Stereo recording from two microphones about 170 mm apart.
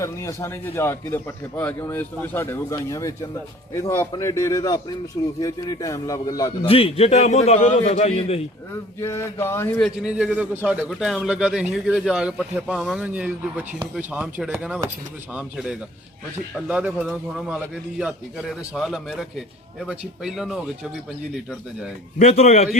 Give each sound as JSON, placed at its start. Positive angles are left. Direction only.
{"t": 0.0, "sound": "a man's voice", "side_deg": 15}
{"t": 6.7, "sound": "a man's voice", "side_deg": 35}
{"t": 9.0, "sound": "a man's voice", "side_deg": 15}
{"t": 9.8, "sound": "a man's voice", "side_deg": -5}
{"t": 22.2, "sound": "a man's voice", "side_deg": 40}